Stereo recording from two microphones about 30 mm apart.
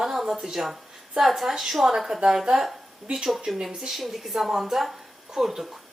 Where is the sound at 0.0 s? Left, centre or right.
Centre.